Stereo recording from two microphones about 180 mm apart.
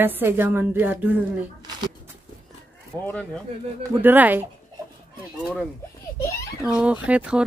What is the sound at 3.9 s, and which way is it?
Speech, 10° right (ahead or behind).